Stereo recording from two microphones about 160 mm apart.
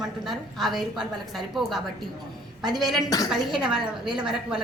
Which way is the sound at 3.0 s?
20° left (ahead or behind).